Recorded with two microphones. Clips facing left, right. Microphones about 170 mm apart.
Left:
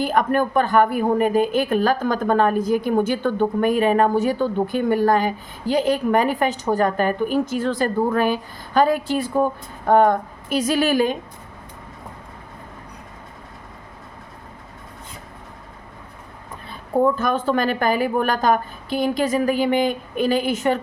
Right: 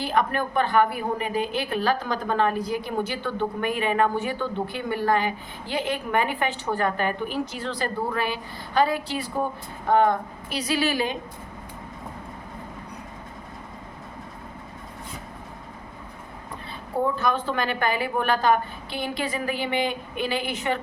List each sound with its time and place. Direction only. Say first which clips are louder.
0.0 s a woman's voice: left 5 dB; 45° left (ahead or behind)
17.2 s a woman's voice: left 5 dB; 45° left (ahead or behind)